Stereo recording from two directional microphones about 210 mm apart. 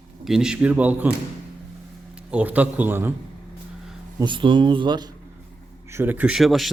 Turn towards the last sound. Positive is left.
turn(degrees=0)  # may be behind; listen again after turning